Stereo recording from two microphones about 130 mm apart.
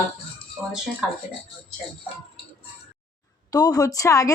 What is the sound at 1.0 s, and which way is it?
Speech, 5° right (ahead or behind).